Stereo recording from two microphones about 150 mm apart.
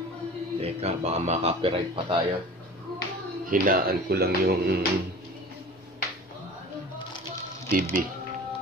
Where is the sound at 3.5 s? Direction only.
75° right (ahead or behind); by 4.8 s 90° right.